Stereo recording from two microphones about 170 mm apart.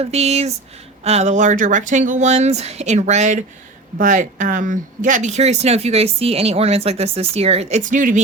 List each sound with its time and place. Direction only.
0.0 s speech: 40° right (ahead or behind)